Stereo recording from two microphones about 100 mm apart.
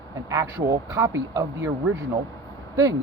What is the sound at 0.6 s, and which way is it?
Speech, 35° right (ahead or behind).